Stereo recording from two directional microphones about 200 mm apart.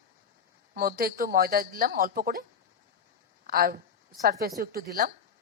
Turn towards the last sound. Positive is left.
turn(degrees=-45)  # may be behind; listen again after turning